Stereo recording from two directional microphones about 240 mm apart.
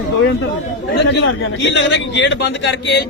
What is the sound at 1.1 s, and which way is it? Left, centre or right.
A man's voice, left.